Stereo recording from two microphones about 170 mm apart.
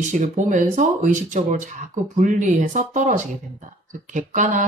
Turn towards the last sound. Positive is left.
turn(degrees=-50)  # may be behind; listen again after turning